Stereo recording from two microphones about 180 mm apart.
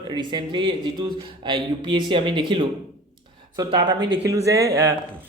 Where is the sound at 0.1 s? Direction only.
25° right (ahead or behind).